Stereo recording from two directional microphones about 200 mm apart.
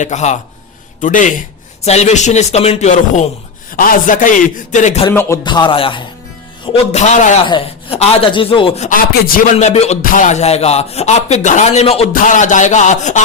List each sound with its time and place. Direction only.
0.0 s speech: 35° left (ahead or behind)
5.1 s speech: 15° left (ahead or behind); by 7.3 s 35° left (ahead or behind)
7.4 s speech: 25° left (ahead or behind)